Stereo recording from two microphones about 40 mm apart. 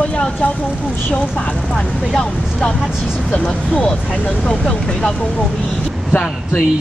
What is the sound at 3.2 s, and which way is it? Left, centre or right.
Speech, left.